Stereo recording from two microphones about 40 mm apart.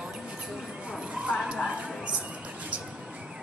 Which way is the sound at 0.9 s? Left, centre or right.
Right.